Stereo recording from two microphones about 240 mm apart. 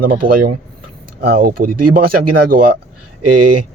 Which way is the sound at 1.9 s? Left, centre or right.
Right.